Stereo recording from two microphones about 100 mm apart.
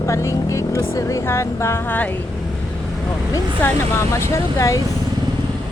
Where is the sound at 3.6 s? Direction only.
25° left (ahead or behind).